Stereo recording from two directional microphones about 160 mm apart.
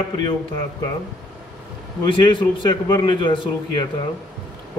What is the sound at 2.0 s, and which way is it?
Speech, 30° left (ahead or behind).